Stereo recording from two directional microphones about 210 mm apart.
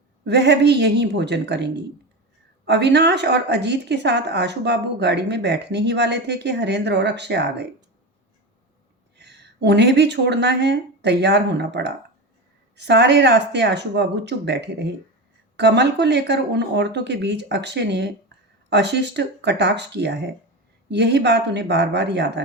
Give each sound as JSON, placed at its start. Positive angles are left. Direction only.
{"t": 0.3, "sound": "a woman's voice", "side_deg": -55}
{"t": 9.1, "sound": "speech", "side_deg": -55}